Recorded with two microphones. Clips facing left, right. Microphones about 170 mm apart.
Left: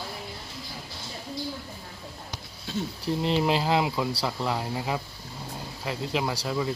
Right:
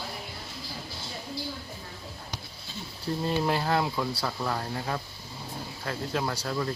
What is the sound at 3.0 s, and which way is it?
Speech, 20° left (ahead or behind).